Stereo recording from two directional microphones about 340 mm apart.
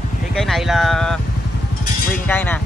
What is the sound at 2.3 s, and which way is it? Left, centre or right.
Speech, centre.